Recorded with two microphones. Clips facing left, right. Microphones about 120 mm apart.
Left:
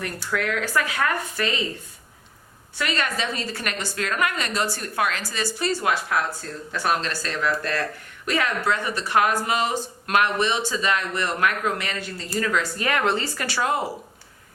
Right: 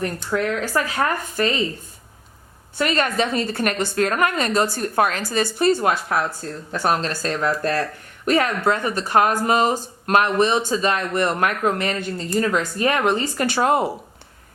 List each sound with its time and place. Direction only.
0.3 s speech: 35° right (ahead or behind)
2.7 s a woman's voice: 45° right (ahead or behind)
12.4 s speech: 30° right (ahead or behind)